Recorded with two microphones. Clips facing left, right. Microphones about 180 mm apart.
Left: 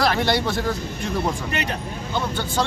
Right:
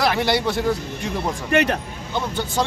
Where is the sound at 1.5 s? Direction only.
75° right (ahead or behind).